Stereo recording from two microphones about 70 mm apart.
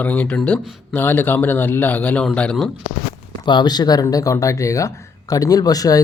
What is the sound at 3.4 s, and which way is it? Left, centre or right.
Speech, left.